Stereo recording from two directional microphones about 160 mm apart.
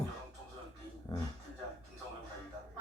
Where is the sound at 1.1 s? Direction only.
25° left (ahead or behind).